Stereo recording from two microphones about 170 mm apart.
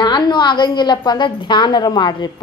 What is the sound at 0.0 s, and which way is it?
A woman's voice, 25° left (ahead or behind).